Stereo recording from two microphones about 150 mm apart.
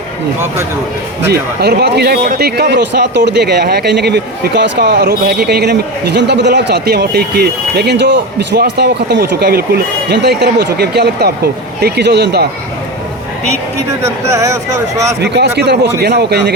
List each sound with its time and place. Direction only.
1.3 s speech: 90° right
14.0 s speech: 20° right (ahead or behind)
15.2 s speech: 90° right